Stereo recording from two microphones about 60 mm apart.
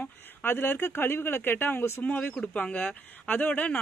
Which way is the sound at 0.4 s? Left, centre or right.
Left.